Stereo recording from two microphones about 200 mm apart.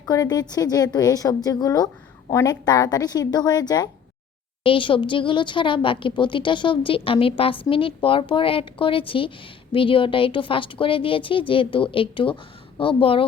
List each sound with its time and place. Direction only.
0.0 s a woman's voice: 20° left (ahead or behind)